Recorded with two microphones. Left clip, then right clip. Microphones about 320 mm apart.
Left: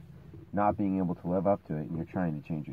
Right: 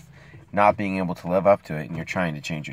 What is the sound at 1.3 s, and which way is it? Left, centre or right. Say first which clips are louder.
Speech: right 10 dB; centre.